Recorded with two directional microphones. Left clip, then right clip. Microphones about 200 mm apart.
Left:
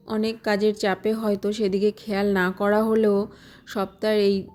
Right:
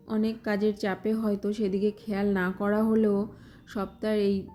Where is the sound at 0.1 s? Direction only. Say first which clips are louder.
Left 6 dB; 50° left (ahead or behind).